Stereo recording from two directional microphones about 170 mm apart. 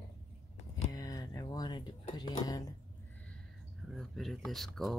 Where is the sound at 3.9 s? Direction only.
Centre (ahead or behind).